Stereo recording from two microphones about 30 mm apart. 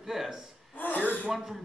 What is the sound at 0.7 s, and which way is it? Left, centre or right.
Speech, left.